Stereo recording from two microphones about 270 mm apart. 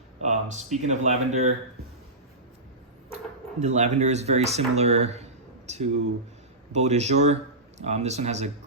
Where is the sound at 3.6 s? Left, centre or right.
Right.